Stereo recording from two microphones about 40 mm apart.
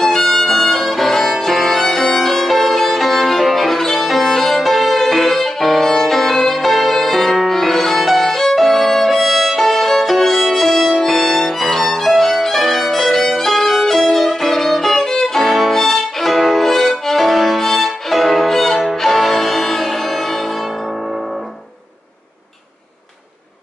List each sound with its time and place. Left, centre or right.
0.0 s violin: centre
1.4 s music: centre
13.1 s violin: centre
18.9 s music: centre